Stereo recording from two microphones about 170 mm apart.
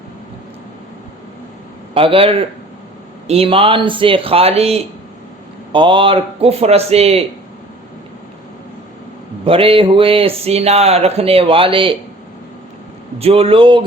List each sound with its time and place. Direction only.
1.9 s speech: 30° right (ahead or behind)
9.4 s speech: 35° right (ahead or behind)
13.1 s speech: 35° right (ahead or behind)